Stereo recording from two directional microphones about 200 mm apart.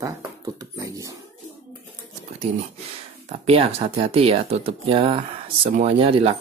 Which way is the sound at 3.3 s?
30° right (ahead or behind).